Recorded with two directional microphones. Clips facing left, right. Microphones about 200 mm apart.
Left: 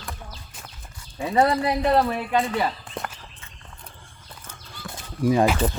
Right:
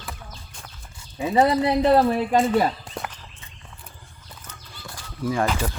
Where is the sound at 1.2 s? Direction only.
5° right (ahead or behind).